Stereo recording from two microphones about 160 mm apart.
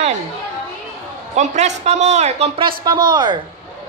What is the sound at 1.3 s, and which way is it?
A man's voice, 45° right (ahead or behind).